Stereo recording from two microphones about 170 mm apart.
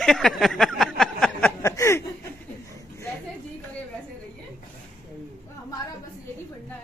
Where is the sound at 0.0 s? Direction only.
Centre (ahead or behind).